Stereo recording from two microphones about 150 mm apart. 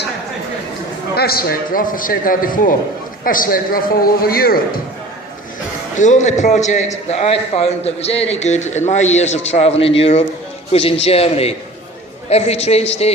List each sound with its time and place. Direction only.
1.1 s a man's voice: 90° left
6.0 s a man's voice: 55° left (ahead or behind)